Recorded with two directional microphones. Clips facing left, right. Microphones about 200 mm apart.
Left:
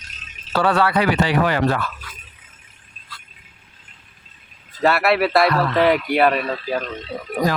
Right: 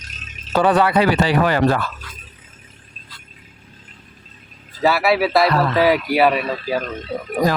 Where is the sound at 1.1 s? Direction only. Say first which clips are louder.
Right 2 dB; 35° right (ahead or behind).